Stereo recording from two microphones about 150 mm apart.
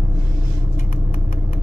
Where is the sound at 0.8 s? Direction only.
70° left (ahead or behind).